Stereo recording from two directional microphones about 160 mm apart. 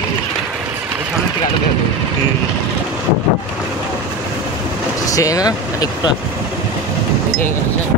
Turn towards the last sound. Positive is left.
turn(degrees=25)  # may be behind; listen again after turning